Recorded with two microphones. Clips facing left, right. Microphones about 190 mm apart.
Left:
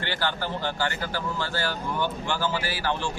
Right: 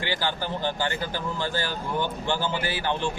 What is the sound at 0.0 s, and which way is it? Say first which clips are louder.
Speech: right 1 dB; 15° right (ahead or behind).